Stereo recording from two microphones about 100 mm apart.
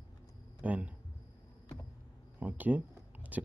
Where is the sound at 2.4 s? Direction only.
15° right (ahead or behind).